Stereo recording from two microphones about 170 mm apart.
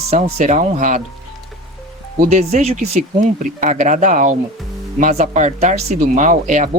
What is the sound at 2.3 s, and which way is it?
Speech, 40° right (ahead or behind).